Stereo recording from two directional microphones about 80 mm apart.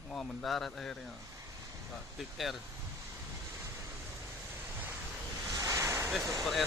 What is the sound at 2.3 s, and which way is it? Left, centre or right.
Speech, centre.